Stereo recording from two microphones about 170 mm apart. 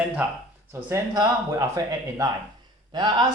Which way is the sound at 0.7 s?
20° right (ahead or behind).